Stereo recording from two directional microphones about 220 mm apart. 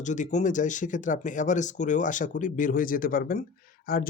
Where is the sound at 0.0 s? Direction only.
35° left (ahead or behind).